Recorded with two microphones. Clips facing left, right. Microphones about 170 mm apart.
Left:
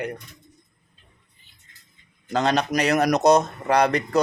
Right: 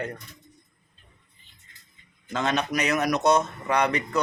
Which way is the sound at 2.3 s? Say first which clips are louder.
Left 4 dB; 35° left (ahead or behind).